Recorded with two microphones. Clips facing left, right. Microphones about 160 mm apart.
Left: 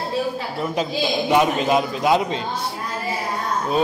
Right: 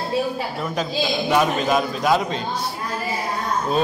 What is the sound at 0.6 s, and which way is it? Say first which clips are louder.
A man's voice: left 2 dB; 20° left (ahead or behind).